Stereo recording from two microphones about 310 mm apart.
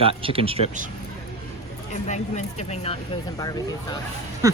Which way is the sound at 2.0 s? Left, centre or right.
Left.